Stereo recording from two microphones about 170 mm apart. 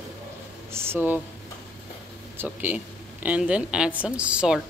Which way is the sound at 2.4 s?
10° right (ahead or behind).